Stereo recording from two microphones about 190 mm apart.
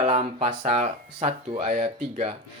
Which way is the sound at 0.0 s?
35° right (ahead or behind).